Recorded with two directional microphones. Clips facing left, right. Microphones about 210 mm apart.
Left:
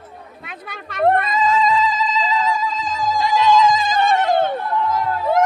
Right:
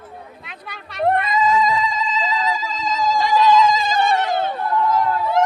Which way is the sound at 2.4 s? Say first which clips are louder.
Left 2 dB; 50° left (ahead or behind).